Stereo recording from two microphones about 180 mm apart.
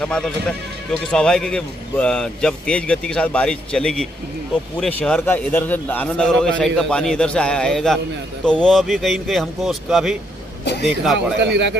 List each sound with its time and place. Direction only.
0.0 s a man's voice: 5° left (ahead or behind)
10.6 s a man's voice: 65° left (ahead or behind)
11.3 s a man's voice: 70° right (ahead or behind)